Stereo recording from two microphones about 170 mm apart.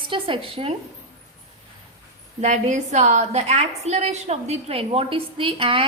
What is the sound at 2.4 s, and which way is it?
A woman's voice, 45° right (ahead or behind).